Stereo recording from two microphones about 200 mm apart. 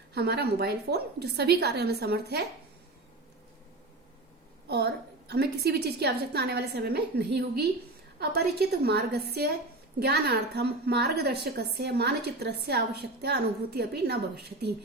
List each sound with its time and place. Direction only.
0.1 s a woman's voice: 55° right (ahead or behind)
4.7 s a woman's voice: 55° right (ahead or behind)